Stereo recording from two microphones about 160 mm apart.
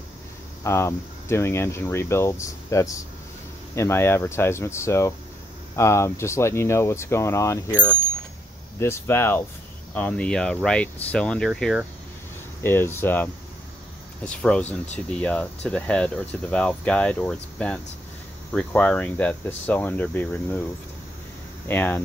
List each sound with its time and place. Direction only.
0.7 s speech: 15° left (ahead or behind); by 11.8 s centre (ahead or behind)
12.6 s speech: 15° left (ahead or behind)
21.6 s speech: 10° left (ahead or behind)